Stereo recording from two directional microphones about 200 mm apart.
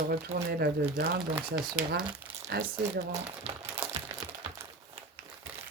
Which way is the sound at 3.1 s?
30° right (ahead or behind).